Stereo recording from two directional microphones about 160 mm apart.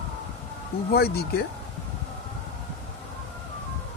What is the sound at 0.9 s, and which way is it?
Speech, 80° left.